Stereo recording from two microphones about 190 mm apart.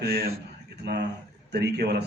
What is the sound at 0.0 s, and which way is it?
Speech, 55° right (ahead or behind).